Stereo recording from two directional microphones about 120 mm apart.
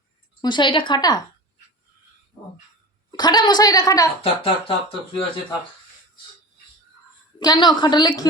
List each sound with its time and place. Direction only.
0.4 s a woman's voice: 40° left (ahead or behind)
3.1 s a woman's voice: 35° left (ahead or behind)
4.2 s speech: 50° left (ahead or behind)
7.3 s a woman's voice: 35° left (ahead or behind)